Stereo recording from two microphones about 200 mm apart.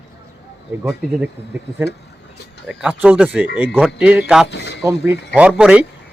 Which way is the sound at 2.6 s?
5° right (ahead or behind).